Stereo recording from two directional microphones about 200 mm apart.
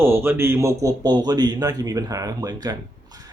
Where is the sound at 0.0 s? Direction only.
10° right (ahead or behind).